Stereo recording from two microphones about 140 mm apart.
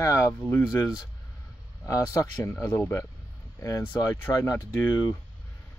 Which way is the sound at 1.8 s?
25° left (ahead or behind).